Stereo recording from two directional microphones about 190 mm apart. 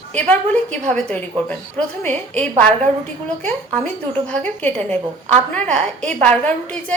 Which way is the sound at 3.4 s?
5° left (ahead or behind).